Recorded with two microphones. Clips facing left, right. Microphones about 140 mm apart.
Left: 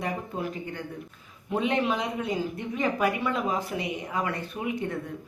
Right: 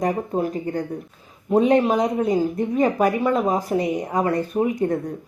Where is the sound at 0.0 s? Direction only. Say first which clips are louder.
Right 9 dB; 40° right (ahead or behind).